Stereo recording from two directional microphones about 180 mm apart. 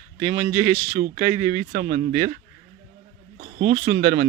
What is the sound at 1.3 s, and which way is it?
Speech, 30° right (ahead or behind).